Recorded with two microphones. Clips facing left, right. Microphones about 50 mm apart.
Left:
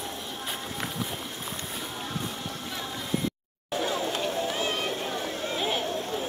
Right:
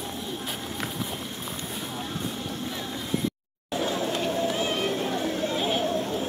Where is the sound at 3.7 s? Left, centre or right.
Centre.